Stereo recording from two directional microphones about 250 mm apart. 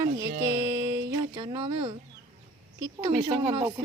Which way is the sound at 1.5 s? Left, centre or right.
Right.